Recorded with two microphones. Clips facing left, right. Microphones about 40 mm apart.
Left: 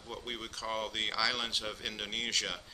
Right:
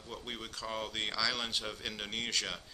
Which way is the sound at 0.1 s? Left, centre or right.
Centre.